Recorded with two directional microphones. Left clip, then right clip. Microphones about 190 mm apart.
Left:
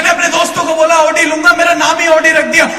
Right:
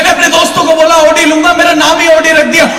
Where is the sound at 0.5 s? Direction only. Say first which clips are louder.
Right 3 dB; 15° left (ahead or behind).